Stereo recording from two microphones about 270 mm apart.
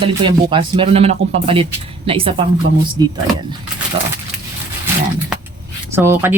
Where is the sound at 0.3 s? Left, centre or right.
Centre.